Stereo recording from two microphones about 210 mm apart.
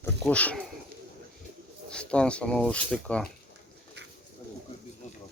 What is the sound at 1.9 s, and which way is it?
Speech, 5° left (ahead or behind).